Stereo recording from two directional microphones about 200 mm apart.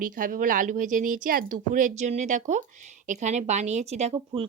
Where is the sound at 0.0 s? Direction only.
45° right (ahead or behind).